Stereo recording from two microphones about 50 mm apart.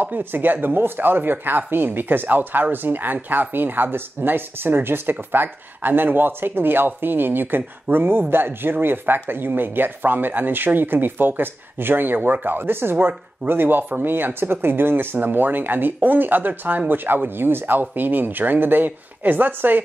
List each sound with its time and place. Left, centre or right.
0.0 s speech: right